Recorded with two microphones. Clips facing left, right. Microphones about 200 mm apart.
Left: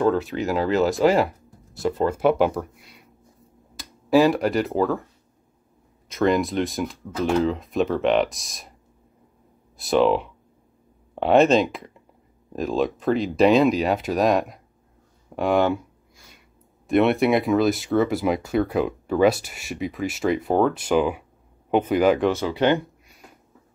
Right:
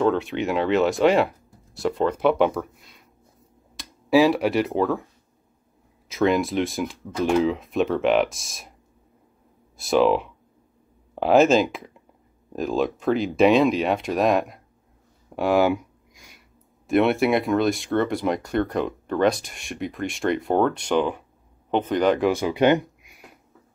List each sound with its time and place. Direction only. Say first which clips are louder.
0.0 s speech: even; centre (ahead or behind)
6.0 s speech: even; centre (ahead or behind)
9.8 s speech: even; centre (ahead or behind)
16.8 s speech: left 1 dB; centre (ahead or behind)
22.3 s speech: right 2 dB; 15° right (ahead or behind)